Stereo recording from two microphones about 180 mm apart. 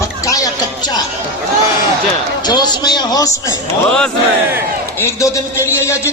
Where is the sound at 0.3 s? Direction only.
20° left (ahead or behind).